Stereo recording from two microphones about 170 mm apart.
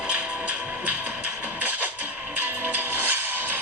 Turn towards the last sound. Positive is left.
turn(degrees=-10)  # may be behind; listen again after turning